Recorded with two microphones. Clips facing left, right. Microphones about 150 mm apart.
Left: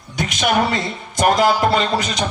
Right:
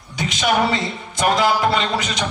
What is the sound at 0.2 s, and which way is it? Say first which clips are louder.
Speech: left 1 dB; 50° left (ahead or behind).